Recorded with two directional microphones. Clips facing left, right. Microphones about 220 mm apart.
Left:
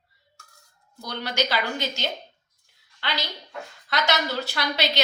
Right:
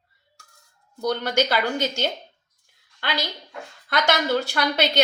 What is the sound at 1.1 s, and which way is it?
A woman's voice, 50° right (ahead or behind).